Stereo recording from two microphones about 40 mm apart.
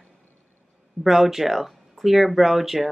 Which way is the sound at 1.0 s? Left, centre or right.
Centre.